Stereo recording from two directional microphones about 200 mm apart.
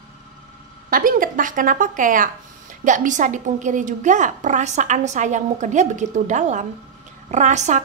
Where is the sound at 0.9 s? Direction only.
45° right (ahead or behind).